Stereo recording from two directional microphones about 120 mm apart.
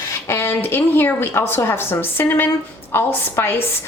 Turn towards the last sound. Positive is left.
turn(degrees=20)  # may be behind; listen again after turning